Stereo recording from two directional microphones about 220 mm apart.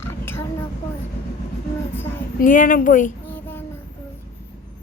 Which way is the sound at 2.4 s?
40° left (ahead or behind).